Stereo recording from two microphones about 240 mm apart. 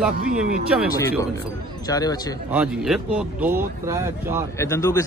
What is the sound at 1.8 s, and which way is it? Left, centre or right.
Speech, centre.